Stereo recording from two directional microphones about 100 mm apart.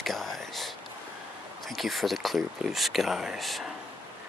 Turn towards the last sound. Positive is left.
turn(degrees=0)  # may be behind; listen again after turning